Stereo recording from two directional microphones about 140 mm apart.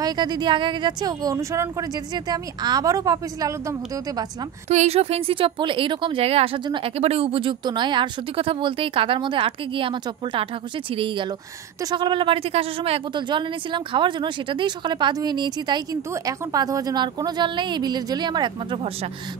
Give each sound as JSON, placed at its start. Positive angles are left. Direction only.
{"t": 0.0, "sound": "speech", "side_deg": -30}
{"t": 4.6, "sound": "speech", "side_deg": -50}